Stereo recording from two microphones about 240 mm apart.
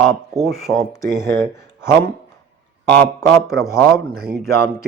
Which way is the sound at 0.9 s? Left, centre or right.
Centre.